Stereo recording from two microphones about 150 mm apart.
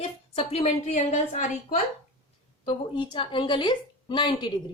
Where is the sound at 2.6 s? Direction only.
30° left (ahead or behind).